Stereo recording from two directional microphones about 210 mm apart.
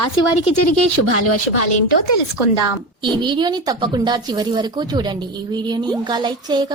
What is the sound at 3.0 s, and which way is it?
Speech, 20° right (ahead or behind).